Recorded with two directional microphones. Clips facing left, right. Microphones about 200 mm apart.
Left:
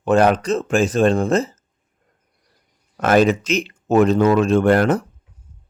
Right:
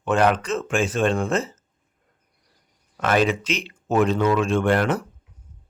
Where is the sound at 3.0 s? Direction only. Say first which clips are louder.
Left 5 dB; 40° left (ahead or behind).